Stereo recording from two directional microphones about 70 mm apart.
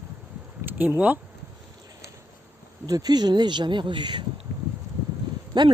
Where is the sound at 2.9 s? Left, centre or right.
Right.